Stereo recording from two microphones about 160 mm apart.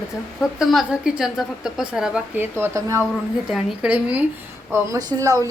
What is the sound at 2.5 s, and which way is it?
Speech, 15° right (ahead or behind).